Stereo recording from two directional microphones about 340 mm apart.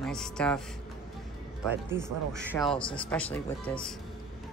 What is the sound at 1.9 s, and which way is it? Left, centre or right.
Speech, centre.